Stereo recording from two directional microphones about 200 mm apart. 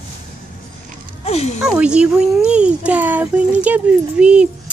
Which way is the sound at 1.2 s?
30° left (ahead or behind).